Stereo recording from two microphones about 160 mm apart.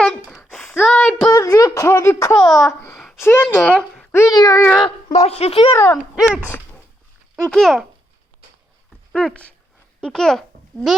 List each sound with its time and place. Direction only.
0.0 s a sound: 5° left (ahead or behind)
1.3 s speech: 20° left (ahead or behind)
2.3 s a child's voice: 5° left (ahead or behind)
2.6 s a child's voice: 15° left (ahead or behind)
4.1 s a child's voice: 20° left (ahead or behind)
5.1 s a woman's voice: 40° left (ahead or behind)
6.0 s dog: 5° right (ahead or behind)
7.5 s a child's voice: centre (ahead or behind)
9.1 s a child's voice: 5° left (ahead or behind)